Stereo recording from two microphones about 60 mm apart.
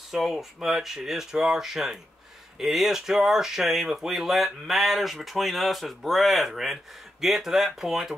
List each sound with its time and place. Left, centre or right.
0.1 s speech: centre